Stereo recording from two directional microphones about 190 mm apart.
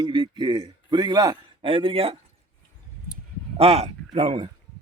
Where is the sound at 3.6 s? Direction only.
30° right (ahead or behind).